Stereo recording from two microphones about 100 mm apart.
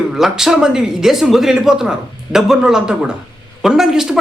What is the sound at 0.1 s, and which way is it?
A man's voice, 5° right (ahead or behind).